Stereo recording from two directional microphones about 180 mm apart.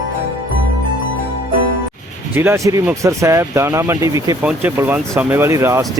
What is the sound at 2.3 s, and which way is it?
Speech, 10° right (ahead or behind).